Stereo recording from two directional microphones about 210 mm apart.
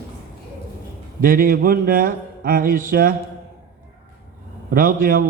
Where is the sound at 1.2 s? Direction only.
40° right (ahead or behind).